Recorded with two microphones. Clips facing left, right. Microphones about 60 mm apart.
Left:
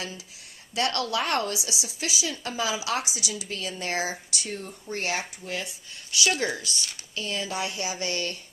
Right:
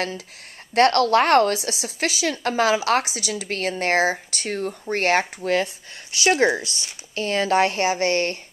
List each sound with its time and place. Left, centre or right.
0.7 s a woman's voice: right
1.6 s a woman's voice: right
5.4 s speech: right
6.1 s speech: right
7.2 s a woman's voice: right